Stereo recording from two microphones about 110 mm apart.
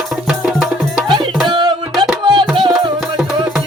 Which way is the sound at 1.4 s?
45° right (ahead or behind).